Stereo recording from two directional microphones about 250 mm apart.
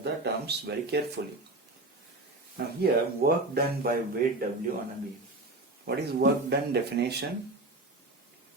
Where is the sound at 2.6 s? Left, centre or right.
Right.